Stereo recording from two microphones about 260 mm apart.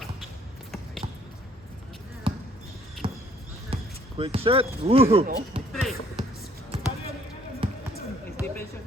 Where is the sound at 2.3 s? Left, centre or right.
Centre.